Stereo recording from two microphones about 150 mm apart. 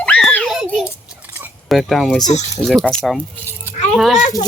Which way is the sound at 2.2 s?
50° left (ahead or behind).